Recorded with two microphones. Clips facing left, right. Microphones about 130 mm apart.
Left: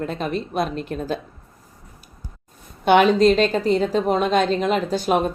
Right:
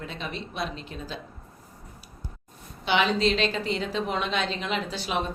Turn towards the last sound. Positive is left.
turn(degrees=45)  # may be behind; listen again after turning